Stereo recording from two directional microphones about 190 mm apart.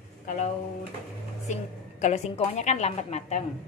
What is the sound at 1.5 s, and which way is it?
A woman's voice, 40° left (ahead or behind).